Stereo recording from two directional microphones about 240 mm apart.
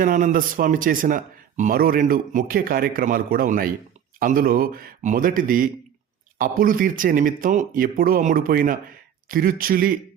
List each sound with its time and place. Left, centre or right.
0.0 s a man's voice: right